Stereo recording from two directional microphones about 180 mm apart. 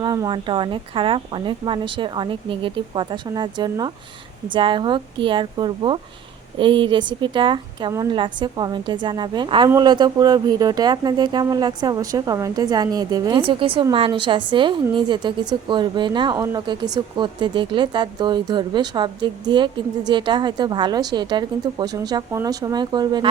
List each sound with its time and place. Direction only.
0.0 s a woman's voice: 25° right (ahead or behind)